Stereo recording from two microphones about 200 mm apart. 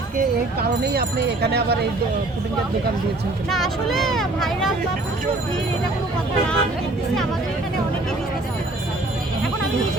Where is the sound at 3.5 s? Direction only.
Centre (ahead or behind).